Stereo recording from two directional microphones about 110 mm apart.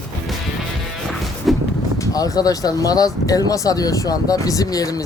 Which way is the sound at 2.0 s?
35° left (ahead or behind).